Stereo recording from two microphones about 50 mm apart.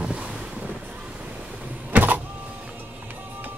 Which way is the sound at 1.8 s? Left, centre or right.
Right.